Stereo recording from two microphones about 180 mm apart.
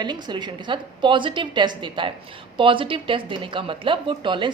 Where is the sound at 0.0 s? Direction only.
25° right (ahead or behind).